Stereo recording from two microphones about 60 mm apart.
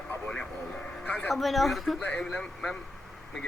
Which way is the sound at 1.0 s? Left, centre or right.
Left.